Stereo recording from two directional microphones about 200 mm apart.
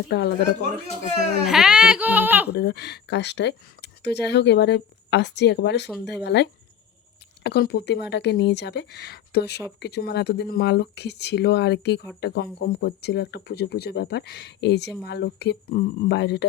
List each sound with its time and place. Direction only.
0.1 s speech: 55° left (ahead or behind)
1.5 s speech: centre (ahead or behind)
2.5 s speech: 55° left (ahead or behind)